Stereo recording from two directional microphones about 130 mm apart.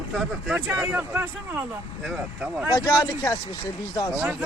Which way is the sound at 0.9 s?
15° right (ahead or behind).